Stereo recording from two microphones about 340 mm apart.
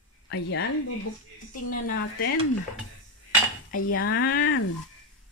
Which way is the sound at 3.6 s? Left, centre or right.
Left.